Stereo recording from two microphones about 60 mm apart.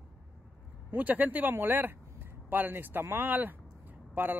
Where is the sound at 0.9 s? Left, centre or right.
Right.